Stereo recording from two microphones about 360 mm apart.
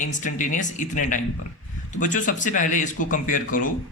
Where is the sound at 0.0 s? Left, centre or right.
Left.